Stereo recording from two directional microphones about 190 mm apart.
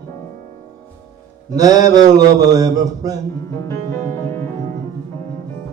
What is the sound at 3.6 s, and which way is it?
Music, 15° left (ahead or behind).